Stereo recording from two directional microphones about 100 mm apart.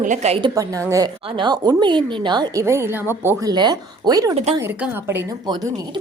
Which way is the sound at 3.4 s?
45° right (ahead or behind).